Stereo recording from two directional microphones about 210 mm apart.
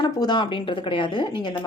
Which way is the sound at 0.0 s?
20° left (ahead or behind).